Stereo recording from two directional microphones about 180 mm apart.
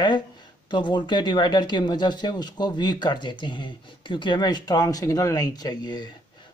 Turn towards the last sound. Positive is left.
turn(degrees=25)  # may be behind; listen again after turning